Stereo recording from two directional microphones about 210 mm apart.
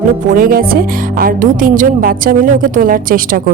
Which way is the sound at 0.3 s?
45° right (ahead or behind).